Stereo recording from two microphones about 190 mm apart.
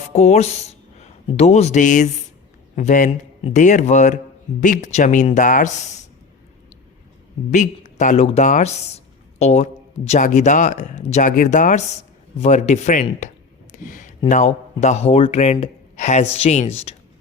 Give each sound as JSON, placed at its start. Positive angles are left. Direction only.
{"t": 0.1, "sound": "speech", "side_deg": 35}
{"t": 7.5, "sound": "speech", "side_deg": 40}
{"t": 13.8, "sound": "a sound", "side_deg": 45}
{"t": 14.3, "sound": "speech", "side_deg": 40}